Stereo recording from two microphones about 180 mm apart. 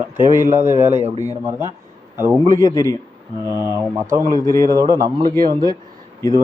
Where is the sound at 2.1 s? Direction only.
15° right (ahead or behind).